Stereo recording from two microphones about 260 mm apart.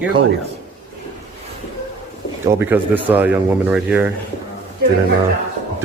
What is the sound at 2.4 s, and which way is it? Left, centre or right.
Speech, centre.